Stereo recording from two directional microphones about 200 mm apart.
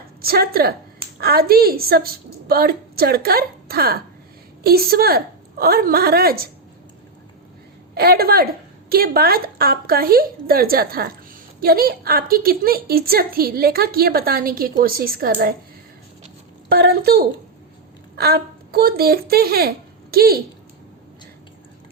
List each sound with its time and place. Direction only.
0.2 s a woman's voice: 50° right (ahead or behind)
7.9 s a woman's voice: 50° right (ahead or behind)
16.6 s a woman's voice: 50° right (ahead or behind)